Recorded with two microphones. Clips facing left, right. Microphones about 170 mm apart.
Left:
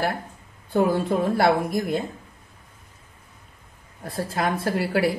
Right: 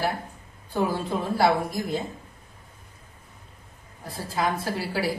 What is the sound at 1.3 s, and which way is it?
Speech, 60° left (ahead or behind).